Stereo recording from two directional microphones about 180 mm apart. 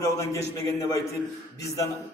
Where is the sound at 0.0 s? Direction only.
15° left (ahead or behind).